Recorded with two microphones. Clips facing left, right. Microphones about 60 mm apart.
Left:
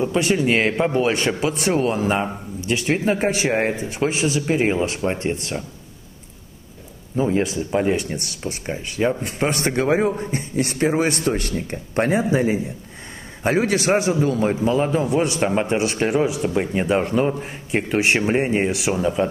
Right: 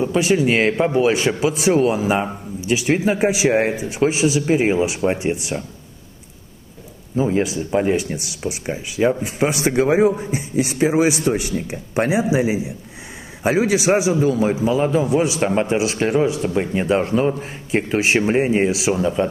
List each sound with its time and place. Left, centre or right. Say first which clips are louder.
0.0 s a man's voice: right 2 dB; centre
7.2 s a man's voice: right 1 dB; centre